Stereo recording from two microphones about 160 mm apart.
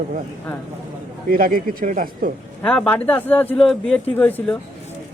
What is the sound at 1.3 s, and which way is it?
Speech, 60° right (ahead or behind).